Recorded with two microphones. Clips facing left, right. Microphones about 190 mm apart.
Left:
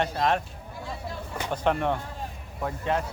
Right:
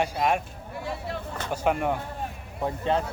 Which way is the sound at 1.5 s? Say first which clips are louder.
Even; 5° right (ahead or behind).